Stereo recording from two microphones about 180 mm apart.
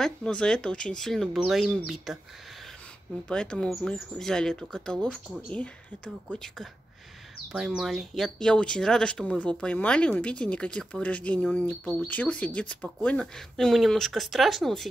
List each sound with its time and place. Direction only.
0.0 s speech: 5° left (ahead or behind)
3.3 s speech: 5° left (ahead or behind)